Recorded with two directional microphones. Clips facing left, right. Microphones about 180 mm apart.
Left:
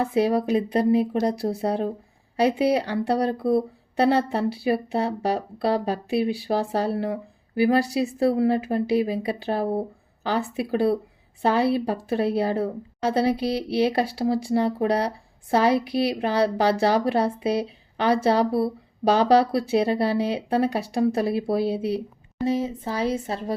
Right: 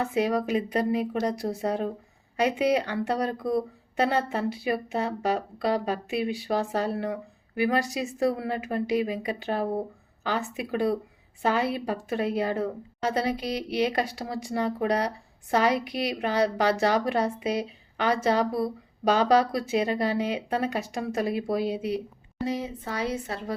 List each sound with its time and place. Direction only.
0.0 s a woman's voice: 30° left (ahead or behind)